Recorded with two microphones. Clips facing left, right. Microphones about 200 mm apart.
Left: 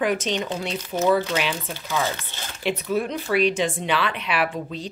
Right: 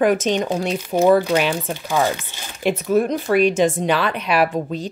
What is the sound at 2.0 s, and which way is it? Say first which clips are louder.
Speech: right 5 dB; 15° right (ahead or behind).